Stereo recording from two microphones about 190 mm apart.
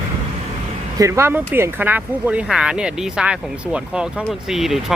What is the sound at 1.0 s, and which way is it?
Speech, 15° right (ahead or behind).